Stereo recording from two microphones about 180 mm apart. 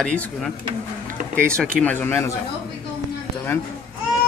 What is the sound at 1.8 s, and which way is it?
Speech, 10° left (ahead or behind).